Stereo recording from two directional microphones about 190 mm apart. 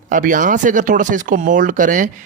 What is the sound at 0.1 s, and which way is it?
Speech, 45° right (ahead or behind).